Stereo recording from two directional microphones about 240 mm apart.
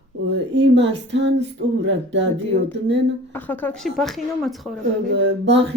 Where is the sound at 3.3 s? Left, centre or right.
Centre.